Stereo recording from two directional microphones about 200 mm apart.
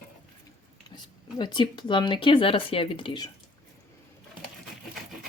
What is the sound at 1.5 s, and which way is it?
Speech, 25° left (ahead or behind).